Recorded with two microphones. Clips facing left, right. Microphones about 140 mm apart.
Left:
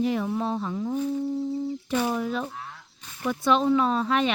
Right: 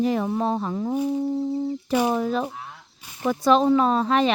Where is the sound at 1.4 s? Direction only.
50° right (ahead or behind).